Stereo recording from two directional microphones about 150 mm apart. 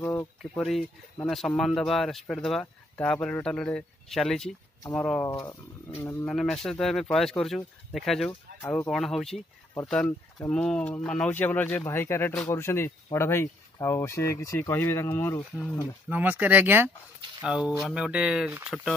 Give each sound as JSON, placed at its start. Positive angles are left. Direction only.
{"t": 0.0, "sound": "a sound", "side_deg": 15}
{"t": 0.4, "sound": "speech", "side_deg": 0}
{"t": 5.3, "sound": "speech", "side_deg": 25}
{"t": 6.2, "sound": "speech", "side_deg": 5}
{"t": 8.6, "sound": "speech", "side_deg": 15}
{"t": 8.9, "sound": "speech", "side_deg": 0}
{"t": 16.1, "sound": "speech", "side_deg": -10}